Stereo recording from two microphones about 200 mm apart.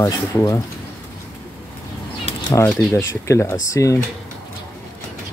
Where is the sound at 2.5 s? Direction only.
10° left (ahead or behind).